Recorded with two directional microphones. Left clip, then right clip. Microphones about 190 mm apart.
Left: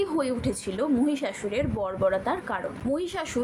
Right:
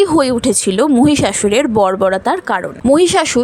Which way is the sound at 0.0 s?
60° right (ahead or behind).